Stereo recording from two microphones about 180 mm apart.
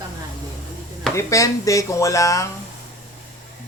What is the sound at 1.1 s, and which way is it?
Speech, 15° left (ahead or behind).